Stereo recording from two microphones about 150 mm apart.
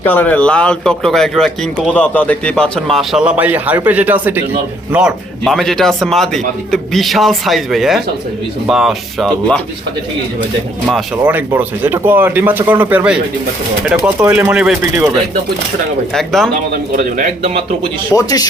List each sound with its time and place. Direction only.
0.0 s speech: 10° left (ahead or behind)
11.3 s speech: 15° right (ahead or behind)
14.3 s speech: 10° right (ahead or behind)
16.1 s speech: centre (ahead or behind)
18.1 s speech: 25° left (ahead or behind)